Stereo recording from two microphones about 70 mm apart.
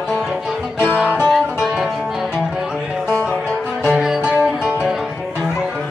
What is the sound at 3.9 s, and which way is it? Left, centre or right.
Music, centre.